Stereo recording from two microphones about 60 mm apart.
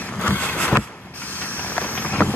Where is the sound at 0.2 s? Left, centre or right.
Left.